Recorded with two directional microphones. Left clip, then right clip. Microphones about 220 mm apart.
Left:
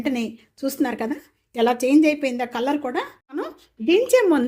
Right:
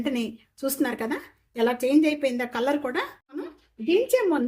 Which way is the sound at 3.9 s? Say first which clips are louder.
Left 5 dB; 35° left (ahead or behind).